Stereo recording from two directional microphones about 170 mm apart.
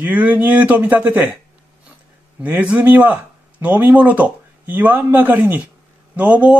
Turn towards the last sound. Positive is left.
turn(degrees=-10)  # may be behind; listen again after turning